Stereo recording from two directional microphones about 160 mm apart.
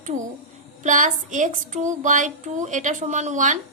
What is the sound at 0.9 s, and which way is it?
A woman's voice, 50° right (ahead or behind).